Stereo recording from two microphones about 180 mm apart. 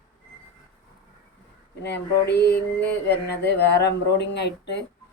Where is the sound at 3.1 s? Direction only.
65° left (ahead or behind).